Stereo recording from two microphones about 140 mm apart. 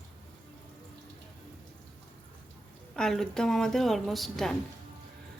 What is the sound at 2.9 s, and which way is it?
A woman's voice, 5° left (ahead or behind).